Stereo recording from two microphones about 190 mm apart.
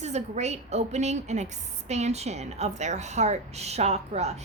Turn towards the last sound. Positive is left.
turn(degrees=-35)  # may be behind; listen again after turning